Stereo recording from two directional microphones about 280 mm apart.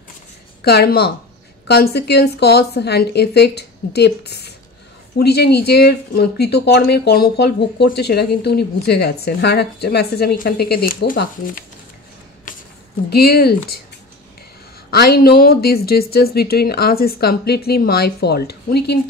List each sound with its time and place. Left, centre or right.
0.7 s speech: left
13.1 s speech: left
14.9 s speech: left